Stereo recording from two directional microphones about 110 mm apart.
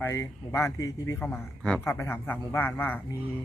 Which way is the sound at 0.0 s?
25° left (ahead or behind).